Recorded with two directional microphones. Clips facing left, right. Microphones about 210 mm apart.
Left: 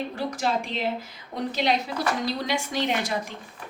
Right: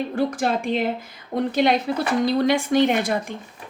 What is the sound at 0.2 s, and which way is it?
Speech, 55° right (ahead or behind).